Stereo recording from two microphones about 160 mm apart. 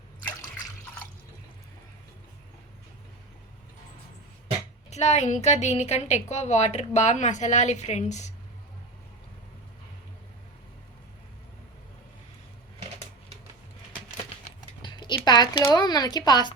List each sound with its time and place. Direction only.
4.9 s a woman's voice: 45° left (ahead or behind)
14.8 s speech: 30° left (ahead or behind)